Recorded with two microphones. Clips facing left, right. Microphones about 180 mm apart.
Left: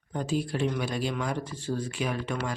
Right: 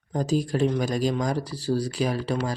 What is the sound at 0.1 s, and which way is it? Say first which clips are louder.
Speech: right 5 dB; 40° right (ahead or behind).